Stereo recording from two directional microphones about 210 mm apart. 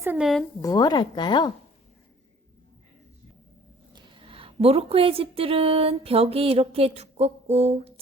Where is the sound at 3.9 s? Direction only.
25° right (ahead or behind).